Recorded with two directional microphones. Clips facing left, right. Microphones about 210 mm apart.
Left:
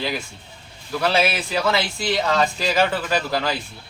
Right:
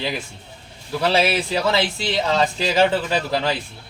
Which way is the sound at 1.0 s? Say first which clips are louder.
Right 2 dB; 30° right (ahead or behind).